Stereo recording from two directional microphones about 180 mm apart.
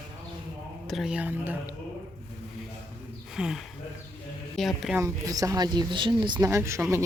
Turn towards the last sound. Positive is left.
turn(degrees=-15)  # may be behind; listen again after turning